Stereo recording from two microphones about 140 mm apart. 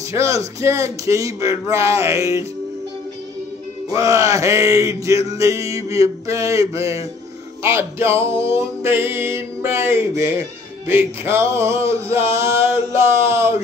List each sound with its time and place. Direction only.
0.1 s male singing: 20° right (ahead or behind)
3.9 s male singing: 25° right (ahead or behind)
7.6 s music: 20° right (ahead or behind)
12.1 s male singing: 20° right (ahead or behind)